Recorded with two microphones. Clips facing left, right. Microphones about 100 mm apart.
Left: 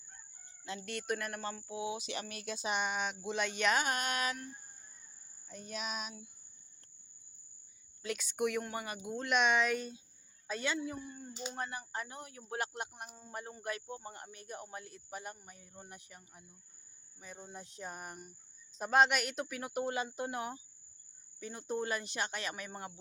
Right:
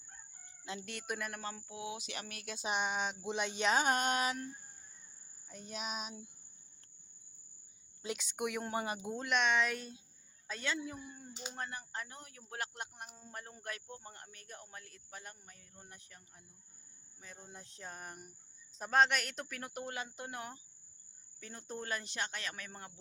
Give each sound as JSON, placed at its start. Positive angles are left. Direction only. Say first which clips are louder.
{"t": 0.6, "sound": "speech", "louder": "left 3 dB", "side_deg": -20}
{"t": 1.3, "sound": "cricket", "louder": "left 3 dB", "side_deg": 0}
{"t": 2.6, "sound": "a sound", "louder": "even", "side_deg": -20}
{"t": 5.5, "sound": "a sound", "louder": "left 1 dB", "side_deg": -15}
{"t": 8.0, "sound": "speech", "louder": "left 4 dB", "side_deg": -15}
{"t": 8.6, "sound": "a sound", "louder": "right 3 dB", "side_deg": -25}
{"t": 9.2, "sound": "cricket", "louder": "left 2 dB", "side_deg": 5}
{"t": 10.4, "sound": "a man's voice", "louder": "left 3 dB", "side_deg": 10}
{"t": 10.8, "sound": "cricket", "louder": "left 3 dB", "side_deg": -5}
{"t": 11.6, "sound": "speech", "louder": "left 1 dB", "side_deg": 10}